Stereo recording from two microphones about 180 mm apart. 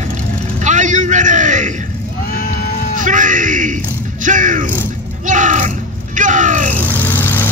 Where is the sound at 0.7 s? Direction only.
45° right (ahead or behind).